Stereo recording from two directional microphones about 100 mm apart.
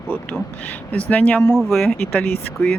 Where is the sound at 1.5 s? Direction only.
5° right (ahead or behind).